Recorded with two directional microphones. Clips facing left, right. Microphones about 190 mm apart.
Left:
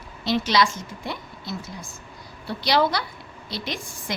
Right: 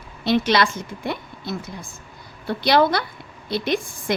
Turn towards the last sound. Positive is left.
turn(degrees=-55)  # may be behind; listen again after turning